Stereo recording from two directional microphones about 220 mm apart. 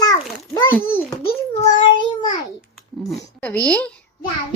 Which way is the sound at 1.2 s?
20° left (ahead or behind).